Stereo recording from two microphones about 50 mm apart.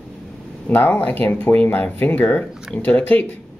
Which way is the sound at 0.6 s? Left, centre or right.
Left.